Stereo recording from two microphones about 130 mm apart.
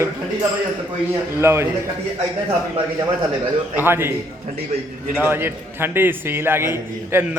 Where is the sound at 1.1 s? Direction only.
20° right (ahead or behind).